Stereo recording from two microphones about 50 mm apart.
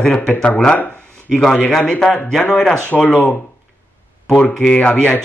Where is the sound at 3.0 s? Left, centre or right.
Left.